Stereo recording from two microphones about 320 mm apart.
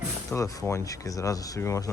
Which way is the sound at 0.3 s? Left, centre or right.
Centre.